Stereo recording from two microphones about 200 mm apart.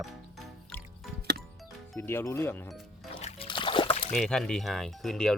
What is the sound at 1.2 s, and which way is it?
Music, 55° right (ahead or behind).